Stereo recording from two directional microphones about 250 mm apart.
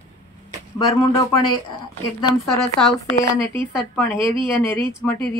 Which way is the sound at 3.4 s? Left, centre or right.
Centre.